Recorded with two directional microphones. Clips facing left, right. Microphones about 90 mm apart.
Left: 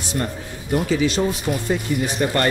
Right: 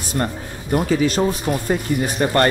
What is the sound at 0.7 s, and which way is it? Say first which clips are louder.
Speech: right 2 dB; 40° right (ahead or behind).